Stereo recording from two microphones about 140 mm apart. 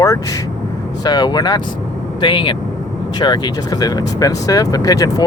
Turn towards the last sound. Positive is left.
turn(degrees=25)  # may be behind; listen again after turning